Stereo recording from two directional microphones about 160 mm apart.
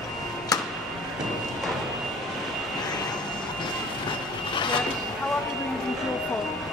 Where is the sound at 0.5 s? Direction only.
25° left (ahead or behind).